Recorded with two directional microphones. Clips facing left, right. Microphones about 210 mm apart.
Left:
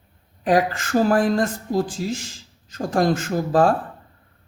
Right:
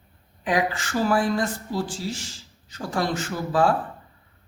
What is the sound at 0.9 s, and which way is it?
Speech, 45° left (ahead or behind).